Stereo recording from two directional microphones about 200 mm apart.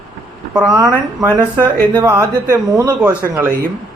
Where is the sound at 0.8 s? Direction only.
20° right (ahead or behind).